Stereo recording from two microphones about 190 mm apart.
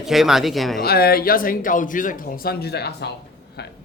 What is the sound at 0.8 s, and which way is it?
A man's voice, 55° left (ahead or behind).